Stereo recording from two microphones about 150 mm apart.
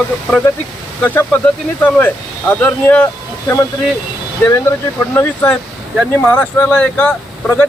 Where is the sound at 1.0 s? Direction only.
15° left (ahead or behind).